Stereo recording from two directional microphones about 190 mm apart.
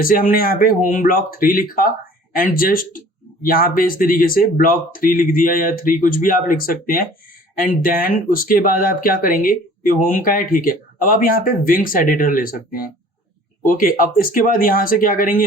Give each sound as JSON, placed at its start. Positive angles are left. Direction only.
{"t": 0.0, "sound": "speech", "side_deg": 45}